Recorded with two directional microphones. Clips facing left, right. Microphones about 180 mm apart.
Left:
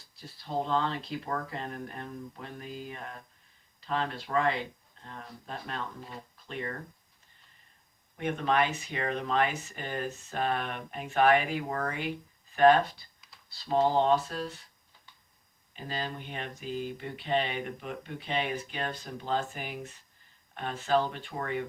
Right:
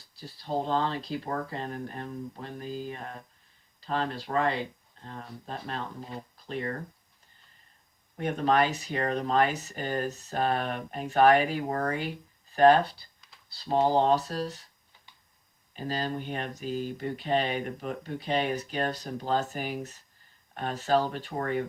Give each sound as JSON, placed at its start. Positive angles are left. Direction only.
{"t": 0.2, "sound": "speech", "side_deg": -35}
{"t": 8.2, "sound": "speech", "side_deg": -40}
{"t": 15.7, "sound": "speech", "side_deg": -40}